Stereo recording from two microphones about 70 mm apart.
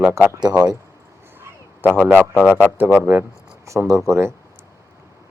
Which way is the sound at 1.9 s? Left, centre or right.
Centre.